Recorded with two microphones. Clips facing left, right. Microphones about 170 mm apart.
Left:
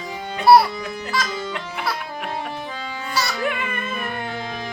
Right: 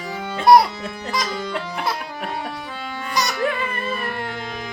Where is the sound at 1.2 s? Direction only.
20° right (ahead or behind).